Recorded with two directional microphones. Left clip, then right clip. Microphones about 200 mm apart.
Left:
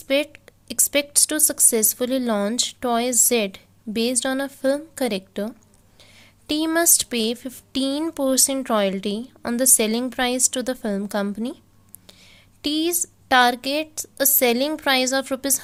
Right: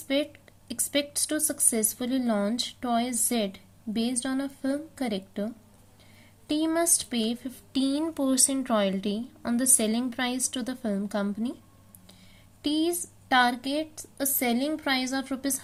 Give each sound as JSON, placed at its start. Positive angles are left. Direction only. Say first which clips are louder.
{"t": 0.1, "sound": "a woman's voice", "louder": "left 7 dB", "side_deg": 30}